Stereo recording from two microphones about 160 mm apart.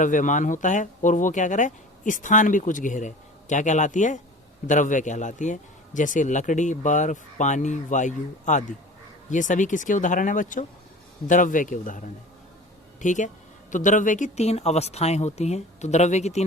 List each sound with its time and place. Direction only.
0.0 s a man's voice: 55° left (ahead or behind)